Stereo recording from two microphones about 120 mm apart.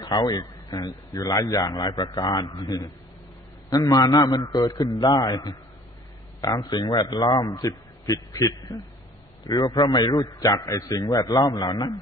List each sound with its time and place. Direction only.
0.0 s a man's voice: 40° left (ahead or behind)